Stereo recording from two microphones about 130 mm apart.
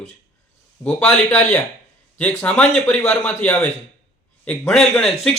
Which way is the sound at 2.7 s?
10° left (ahead or behind).